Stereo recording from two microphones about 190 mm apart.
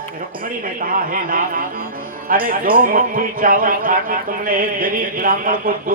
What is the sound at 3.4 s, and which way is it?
Speech, 50° right (ahead or behind).